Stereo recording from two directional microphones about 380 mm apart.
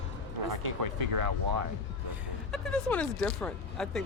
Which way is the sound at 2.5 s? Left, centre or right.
Centre.